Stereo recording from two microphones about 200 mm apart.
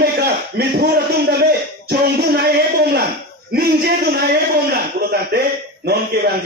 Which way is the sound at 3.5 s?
50° right (ahead or behind).